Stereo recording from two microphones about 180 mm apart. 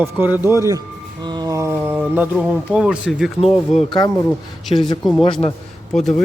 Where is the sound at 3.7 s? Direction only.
30° left (ahead or behind).